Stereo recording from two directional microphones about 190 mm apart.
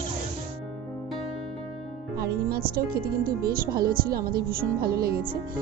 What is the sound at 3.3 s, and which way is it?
Speech, 50° right (ahead or behind).